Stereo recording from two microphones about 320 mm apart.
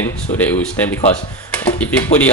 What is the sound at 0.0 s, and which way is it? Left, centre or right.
Speech, centre.